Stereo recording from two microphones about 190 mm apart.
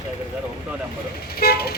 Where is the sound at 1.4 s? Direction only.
55° left (ahead or behind).